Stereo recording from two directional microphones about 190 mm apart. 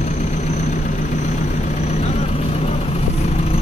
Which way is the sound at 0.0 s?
40° left (ahead or behind).